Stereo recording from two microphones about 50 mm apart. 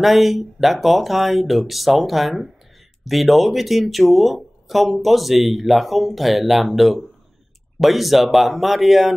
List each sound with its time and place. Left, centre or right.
0.0 s speech: centre